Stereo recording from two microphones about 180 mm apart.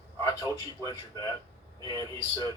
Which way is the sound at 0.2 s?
20° left (ahead or behind).